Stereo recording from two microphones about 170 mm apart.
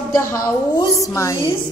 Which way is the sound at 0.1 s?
20° left (ahead or behind).